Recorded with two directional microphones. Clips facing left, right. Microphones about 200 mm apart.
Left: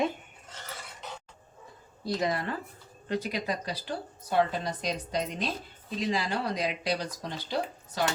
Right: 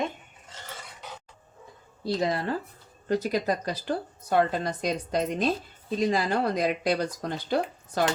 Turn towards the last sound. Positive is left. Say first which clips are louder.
# right 5 dB
turn(degrees=-55)  # may be behind; listen again after turning